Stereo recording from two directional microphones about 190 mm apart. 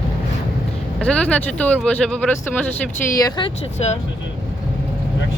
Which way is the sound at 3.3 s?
35° left (ahead or behind).